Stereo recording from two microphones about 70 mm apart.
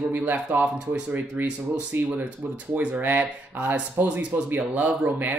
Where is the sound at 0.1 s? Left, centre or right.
Right.